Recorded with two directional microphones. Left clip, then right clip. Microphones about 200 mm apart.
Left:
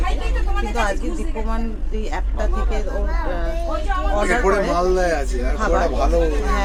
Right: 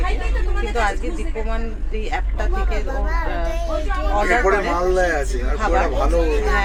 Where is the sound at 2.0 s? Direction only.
15° left (ahead or behind).